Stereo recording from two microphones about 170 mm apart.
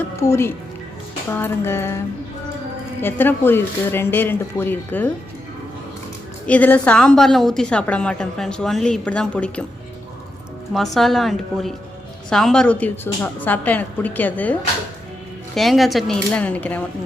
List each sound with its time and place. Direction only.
0.2 s a woman's voice: 15° left (ahead or behind)
3.0 s a woman's voice: 10° left (ahead or behind)
6.4 s a woman's voice: 10° left (ahead or behind)
10.9 s a woman's voice: centre (ahead or behind)